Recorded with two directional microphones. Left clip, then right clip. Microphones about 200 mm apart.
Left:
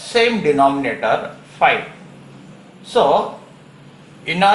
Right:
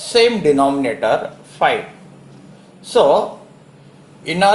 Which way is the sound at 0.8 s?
45° right (ahead or behind).